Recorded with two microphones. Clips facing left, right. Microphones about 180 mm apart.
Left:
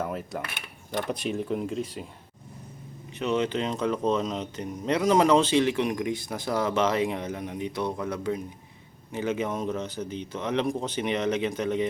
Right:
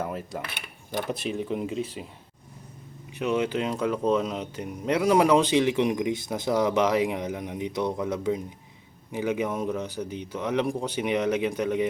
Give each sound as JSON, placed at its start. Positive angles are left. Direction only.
{"t": 0.0, "sound": "speech", "side_deg": 0}
{"t": 3.2, "sound": "speech", "side_deg": -10}